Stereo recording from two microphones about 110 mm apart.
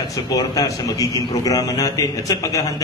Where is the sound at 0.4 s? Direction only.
35° left (ahead or behind).